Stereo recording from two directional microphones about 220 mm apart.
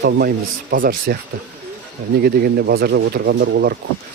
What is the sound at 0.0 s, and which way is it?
Speech, 45° right (ahead or behind).